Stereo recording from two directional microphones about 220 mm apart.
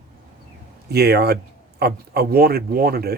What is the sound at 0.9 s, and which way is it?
Speech, 45° right (ahead or behind).